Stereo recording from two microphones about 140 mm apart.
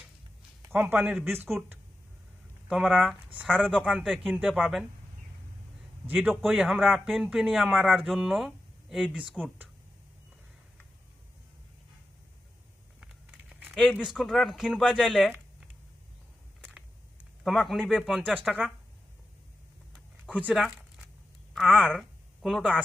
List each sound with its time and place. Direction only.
0.7 s a man's voice: 10° right (ahead or behind)
2.6 s speech: 5° right (ahead or behind)
6.4 s speech: 5° right (ahead or behind)
13.5 s a sound: centre (ahead or behind)
13.9 s speech: 5° right (ahead or behind)
17.4 s speech: centre (ahead or behind)
20.2 s speech: 10° right (ahead or behind)
20.5 s a sound: centre (ahead or behind)
21.5 s speech: centre (ahead or behind)